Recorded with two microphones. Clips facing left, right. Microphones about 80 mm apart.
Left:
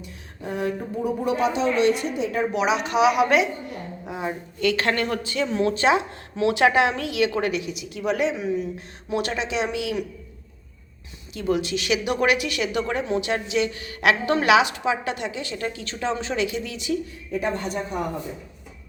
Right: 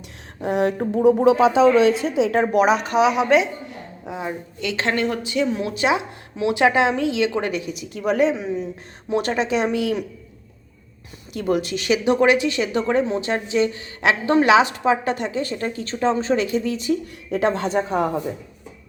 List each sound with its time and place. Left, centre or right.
0.4 s a woman's voice: right
2.5 s speech: right
4.6 s speech: right
7.4 s speech: right
11.3 s speech: right
17.3 s speech: right